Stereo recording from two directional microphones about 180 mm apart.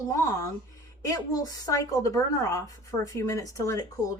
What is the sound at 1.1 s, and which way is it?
Speech, 20° left (ahead or behind).